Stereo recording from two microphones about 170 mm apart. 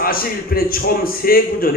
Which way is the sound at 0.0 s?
60° left (ahead or behind).